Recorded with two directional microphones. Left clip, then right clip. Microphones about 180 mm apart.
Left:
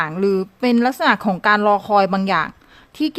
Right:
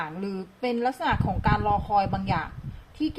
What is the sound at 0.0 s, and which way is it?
A woman's voice, 60° left (ahead or behind).